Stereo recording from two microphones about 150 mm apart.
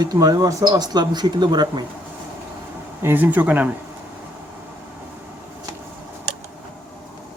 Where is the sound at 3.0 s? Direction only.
15° right (ahead or behind).